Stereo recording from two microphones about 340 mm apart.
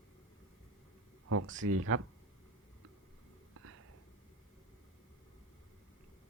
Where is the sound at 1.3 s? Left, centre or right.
Right.